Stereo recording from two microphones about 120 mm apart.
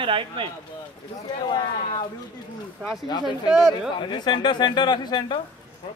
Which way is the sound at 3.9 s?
40° left (ahead or behind).